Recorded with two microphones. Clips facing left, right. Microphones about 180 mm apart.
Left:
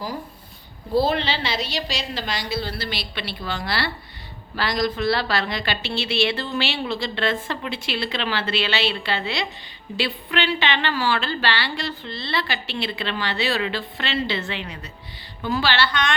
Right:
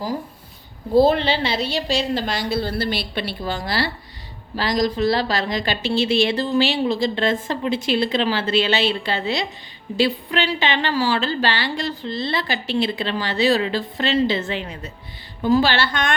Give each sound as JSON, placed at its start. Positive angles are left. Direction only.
{"t": 0.9, "sound": "a woman's voice", "side_deg": -50}